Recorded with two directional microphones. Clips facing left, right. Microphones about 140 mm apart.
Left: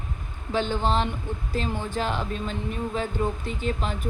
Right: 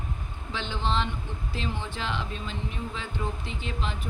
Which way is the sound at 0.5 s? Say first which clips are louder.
Left 6 dB; 45° left (ahead or behind).